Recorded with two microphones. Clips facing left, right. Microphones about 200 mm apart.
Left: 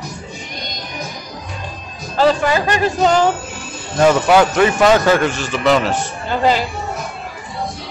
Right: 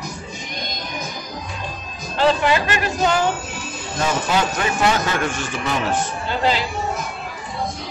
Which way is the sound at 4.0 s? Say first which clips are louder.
Left 9 dB; 85° left.